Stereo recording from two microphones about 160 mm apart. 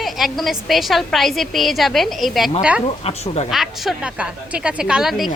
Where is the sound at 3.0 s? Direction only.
40° left (ahead or behind).